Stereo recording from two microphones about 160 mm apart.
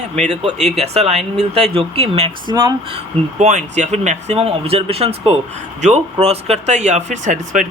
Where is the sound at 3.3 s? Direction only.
50° right (ahead or behind).